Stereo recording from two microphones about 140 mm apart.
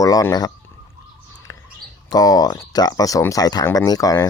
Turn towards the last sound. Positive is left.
turn(degrees=25)  # may be behind; listen again after turning